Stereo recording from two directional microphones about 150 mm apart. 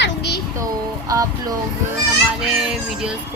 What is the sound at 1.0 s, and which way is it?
Speech, 25° right (ahead or behind).